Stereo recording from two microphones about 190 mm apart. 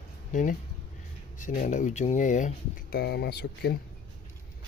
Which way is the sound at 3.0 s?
60° left (ahead or behind).